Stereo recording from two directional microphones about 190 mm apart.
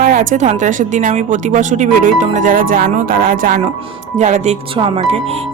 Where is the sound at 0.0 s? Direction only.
45° right (ahead or behind).